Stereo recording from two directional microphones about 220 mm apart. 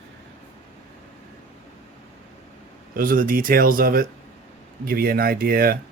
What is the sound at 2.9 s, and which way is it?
Speech, 40° right (ahead or behind).